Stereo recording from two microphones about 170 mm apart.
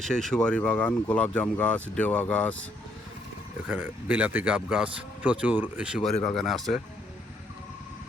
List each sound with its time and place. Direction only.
0.0 s speech: centre (ahead or behind)
3.7 s speech: 10° right (ahead or behind)